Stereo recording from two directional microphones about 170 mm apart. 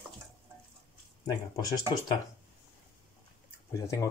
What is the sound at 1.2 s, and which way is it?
Speech, 25° left (ahead or behind).